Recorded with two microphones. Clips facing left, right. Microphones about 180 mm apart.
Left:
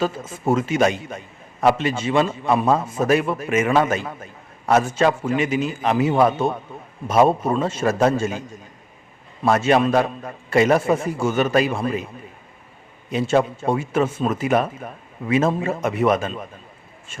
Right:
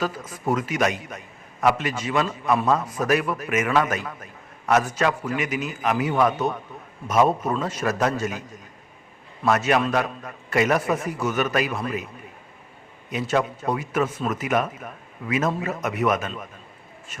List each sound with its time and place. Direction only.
0.0 s a man's voice: 25° left (ahead or behind)
13.1 s a man's voice: 30° left (ahead or behind)